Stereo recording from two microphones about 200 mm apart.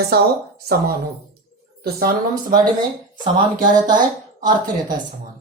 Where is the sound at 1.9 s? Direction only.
50° right (ahead or behind).